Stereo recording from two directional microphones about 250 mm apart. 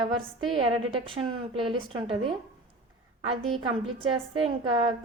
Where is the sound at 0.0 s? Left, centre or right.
Right.